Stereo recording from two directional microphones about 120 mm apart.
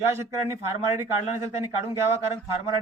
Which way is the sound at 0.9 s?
20° right (ahead or behind).